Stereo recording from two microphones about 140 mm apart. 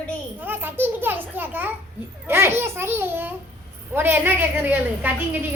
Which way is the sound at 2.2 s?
15° right (ahead or behind).